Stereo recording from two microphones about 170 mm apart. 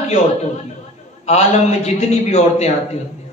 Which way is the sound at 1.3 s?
40° left (ahead or behind).